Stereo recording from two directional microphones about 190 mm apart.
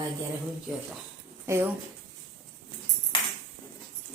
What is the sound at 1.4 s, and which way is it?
Speech, 15° right (ahead or behind).